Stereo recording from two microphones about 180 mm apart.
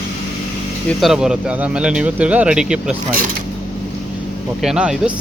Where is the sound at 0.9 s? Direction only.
Centre (ahead or behind).